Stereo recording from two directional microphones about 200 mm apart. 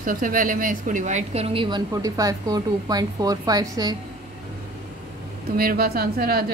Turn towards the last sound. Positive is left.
turn(degrees=-50)  # may be behind; listen again after turning